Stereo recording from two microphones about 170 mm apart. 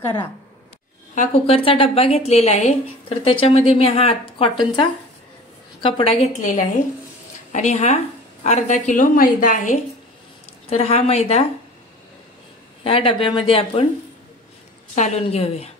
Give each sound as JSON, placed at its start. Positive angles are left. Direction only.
{"t": 1.1, "sound": "a woman's voice", "side_deg": 40}
{"t": 12.8, "sound": "a woman's voice", "side_deg": 30}
{"t": 15.0, "sound": "a woman's voice", "side_deg": 40}